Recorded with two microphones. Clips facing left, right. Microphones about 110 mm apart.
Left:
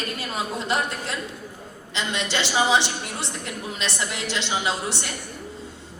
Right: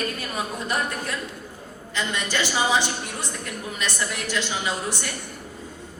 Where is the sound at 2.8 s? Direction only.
80° left.